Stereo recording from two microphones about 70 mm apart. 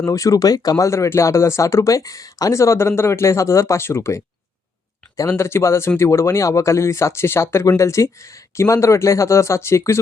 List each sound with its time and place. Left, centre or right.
0.0 s speech: left
0.9 s speech: left
5.4 s speech: left